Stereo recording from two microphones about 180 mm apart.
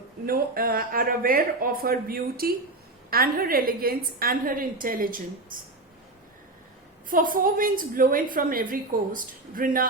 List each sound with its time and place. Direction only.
0.3 s a woman's voice: 55° right (ahead or behind)
7.1 s a woman's voice: 50° right (ahead or behind)